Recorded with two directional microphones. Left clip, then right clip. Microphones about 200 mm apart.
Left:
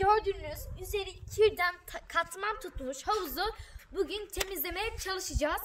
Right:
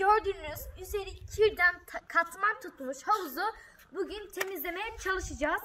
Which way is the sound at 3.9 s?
45° left (ahead or behind).